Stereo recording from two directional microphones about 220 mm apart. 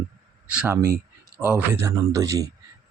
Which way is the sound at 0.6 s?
10° right (ahead or behind).